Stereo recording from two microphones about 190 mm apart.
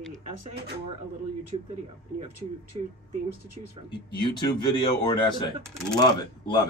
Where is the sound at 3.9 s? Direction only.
25° left (ahead or behind).